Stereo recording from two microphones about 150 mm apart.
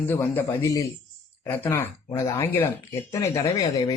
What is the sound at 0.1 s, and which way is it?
A man's voice, 15° left (ahead or behind).